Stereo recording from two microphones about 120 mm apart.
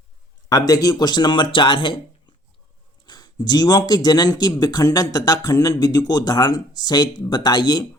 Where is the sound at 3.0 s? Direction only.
35° left (ahead or behind).